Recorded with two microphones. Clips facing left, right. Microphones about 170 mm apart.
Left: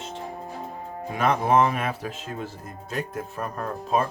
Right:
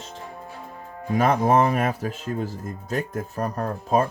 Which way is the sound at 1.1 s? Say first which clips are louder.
Right 2 dB; 40° right (ahead or behind).